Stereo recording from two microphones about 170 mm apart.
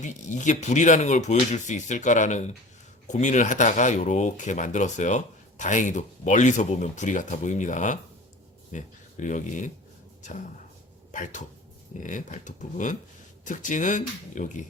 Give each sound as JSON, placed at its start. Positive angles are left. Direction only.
{"t": 0.0, "sound": "speech", "side_deg": 45}
{"t": 11.1, "sound": "speech", "side_deg": 50}